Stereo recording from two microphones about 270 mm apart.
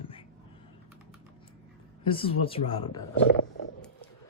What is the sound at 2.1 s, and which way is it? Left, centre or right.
Speech, centre.